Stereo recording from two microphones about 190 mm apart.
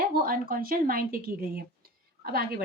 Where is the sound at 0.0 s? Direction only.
50° right (ahead or behind).